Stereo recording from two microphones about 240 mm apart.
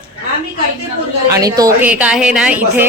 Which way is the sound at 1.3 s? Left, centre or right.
Centre.